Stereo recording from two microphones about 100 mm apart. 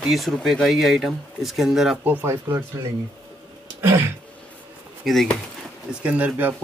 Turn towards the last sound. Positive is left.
turn(degrees=-15)  # may be behind; listen again after turning